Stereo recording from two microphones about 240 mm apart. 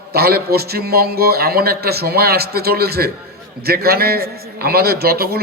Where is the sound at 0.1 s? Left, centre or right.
Right.